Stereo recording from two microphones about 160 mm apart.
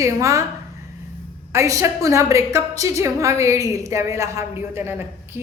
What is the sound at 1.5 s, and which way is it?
A woman's voice, 20° right (ahead or behind).